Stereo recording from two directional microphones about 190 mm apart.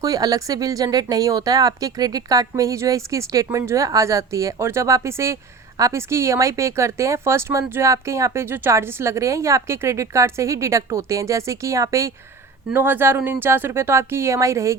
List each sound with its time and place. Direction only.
0.0 s speech: 20° right (ahead or behind)